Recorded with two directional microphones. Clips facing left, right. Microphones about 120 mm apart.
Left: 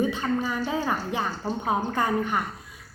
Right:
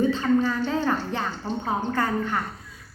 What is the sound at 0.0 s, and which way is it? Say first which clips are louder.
A woman's voice: right 4 dB; 15° left (ahead or behind).